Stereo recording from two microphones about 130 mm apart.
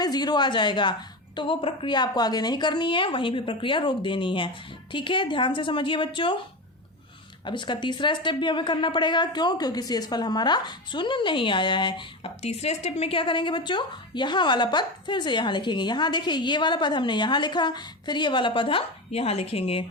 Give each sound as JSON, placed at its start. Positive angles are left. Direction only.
{"t": 0.0, "sound": "a woman's voice", "side_deg": 30}
{"t": 7.4, "sound": "a woman's voice", "side_deg": 35}
{"t": 12.4, "sound": "a woman's voice", "side_deg": 55}